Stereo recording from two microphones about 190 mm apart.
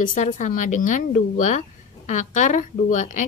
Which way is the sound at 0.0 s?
40° left (ahead or behind).